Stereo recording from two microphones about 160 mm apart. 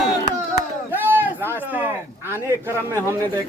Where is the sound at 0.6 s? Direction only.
15° right (ahead or behind).